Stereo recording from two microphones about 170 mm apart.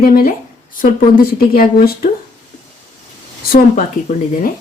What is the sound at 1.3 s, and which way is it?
Speech, 60° left (ahead or behind).